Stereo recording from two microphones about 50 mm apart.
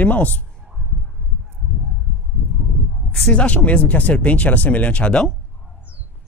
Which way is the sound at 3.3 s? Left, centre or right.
Left.